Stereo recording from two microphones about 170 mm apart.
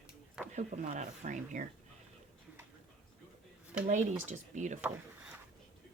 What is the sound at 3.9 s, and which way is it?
Speech, 45° right (ahead or behind).